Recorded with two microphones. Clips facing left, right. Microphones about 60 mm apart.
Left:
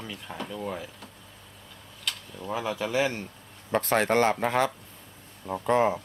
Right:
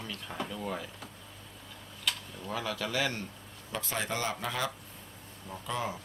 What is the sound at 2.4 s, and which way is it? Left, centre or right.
Speech, centre.